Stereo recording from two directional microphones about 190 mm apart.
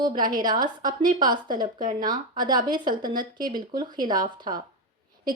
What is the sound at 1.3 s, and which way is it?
Speech, 25° right (ahead or behind).